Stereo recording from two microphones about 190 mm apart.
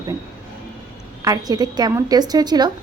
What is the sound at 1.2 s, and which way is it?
A woman's voice, 20° right (ahead or behind).